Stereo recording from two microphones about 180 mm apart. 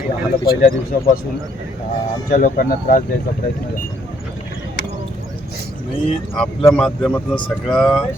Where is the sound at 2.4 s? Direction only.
50° left (ahead or behind).